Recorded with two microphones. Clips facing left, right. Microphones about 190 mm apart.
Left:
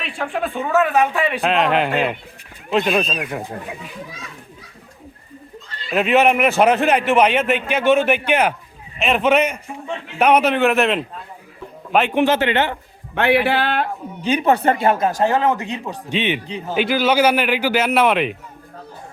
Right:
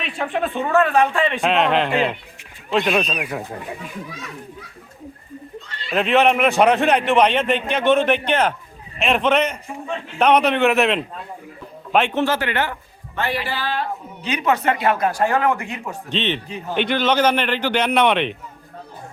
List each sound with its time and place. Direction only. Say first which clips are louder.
0.2 s a man's voice: right 1 dB; centre (ahead or behind)
5.9 s a man's voice: left 1 dB; 5° left (ahead or behind)
12.1 s speech: left 4 dB; 20° left (ahead or behind)
13.1 s speech: left 8 dB; 65° left (ahead or behind)
14.3 s speech: left 4 dB; 30° left (ahead or behind)
16.0 s a man's voice: left 2 dB; 10° left (ahead or behind)